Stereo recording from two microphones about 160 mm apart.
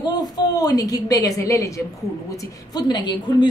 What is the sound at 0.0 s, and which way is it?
A woman's voice, 25° left (ahead or behind).